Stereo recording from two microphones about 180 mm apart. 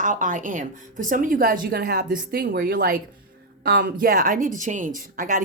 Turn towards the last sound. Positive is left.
turn(degrees=-50)  # may be behind; listen again after turning